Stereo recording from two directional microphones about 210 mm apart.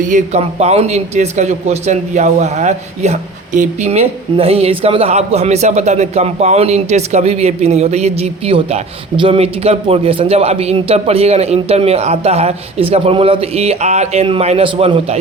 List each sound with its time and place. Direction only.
0.0 s a man's voice: 35° right (ahead or behind)